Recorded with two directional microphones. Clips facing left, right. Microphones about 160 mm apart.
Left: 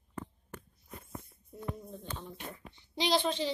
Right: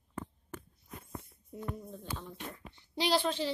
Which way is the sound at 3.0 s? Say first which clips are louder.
Even; 5° right (ahead or behind).